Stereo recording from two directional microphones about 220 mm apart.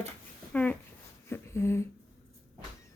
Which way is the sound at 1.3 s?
10° left (ahead or behind).